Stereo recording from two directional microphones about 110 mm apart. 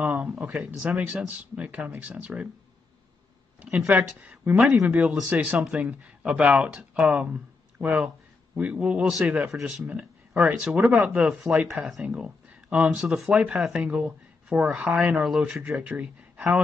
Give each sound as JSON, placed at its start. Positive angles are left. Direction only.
{"t": 0.0, "sound": "a man's voice", "side_deg": -15}
{"t": 3.7, "sound": "a man's voice", "side_deg": -10}